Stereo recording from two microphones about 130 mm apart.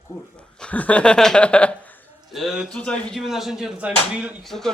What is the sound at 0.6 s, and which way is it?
Speech, 10° left (ahead or behind).